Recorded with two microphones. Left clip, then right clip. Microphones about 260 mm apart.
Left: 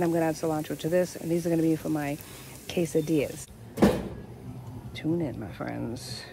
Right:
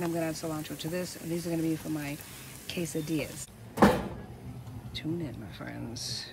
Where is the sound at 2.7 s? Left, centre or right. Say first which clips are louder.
Left 9 dB; left.